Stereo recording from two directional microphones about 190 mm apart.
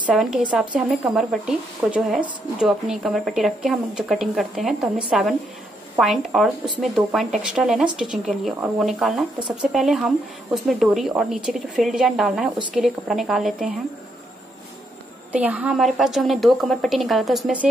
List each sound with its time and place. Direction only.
0.0 s speech: centre (ahead or behind)
15.3 s speech: 5° right (ahead or behind)